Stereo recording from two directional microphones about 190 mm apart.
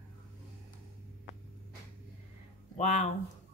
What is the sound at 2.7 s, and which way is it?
Speech, 40° left (ahead or behind).